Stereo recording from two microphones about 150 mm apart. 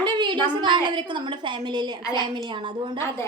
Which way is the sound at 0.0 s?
30° right (ahead or behind).